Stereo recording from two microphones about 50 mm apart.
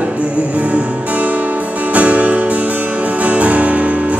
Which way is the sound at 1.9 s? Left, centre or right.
Right.